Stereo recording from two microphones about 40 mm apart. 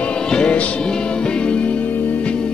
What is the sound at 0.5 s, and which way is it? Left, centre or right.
Music, left.